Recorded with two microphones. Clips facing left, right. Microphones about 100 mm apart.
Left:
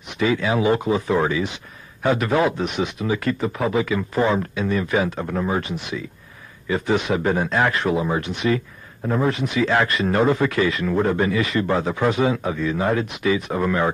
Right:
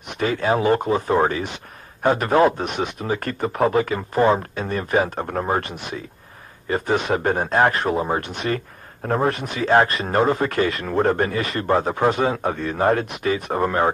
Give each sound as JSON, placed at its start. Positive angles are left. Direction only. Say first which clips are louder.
{"t": 0.2, "sound": "speech", "louder": "even", "side_deg": -45}